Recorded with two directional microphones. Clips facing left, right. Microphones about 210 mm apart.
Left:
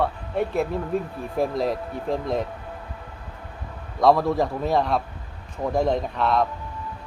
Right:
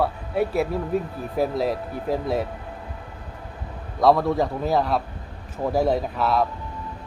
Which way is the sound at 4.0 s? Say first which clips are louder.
Even; centre (ahead or behind).